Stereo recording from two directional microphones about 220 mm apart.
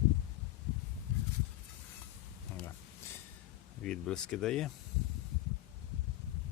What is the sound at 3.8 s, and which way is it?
Speech, 5° left (ahead or behind).